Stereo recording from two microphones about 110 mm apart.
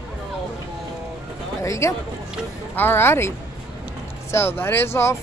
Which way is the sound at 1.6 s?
25° left (ahead or behind).